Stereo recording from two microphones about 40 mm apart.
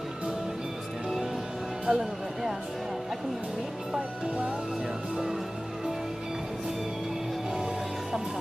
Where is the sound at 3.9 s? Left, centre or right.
Right.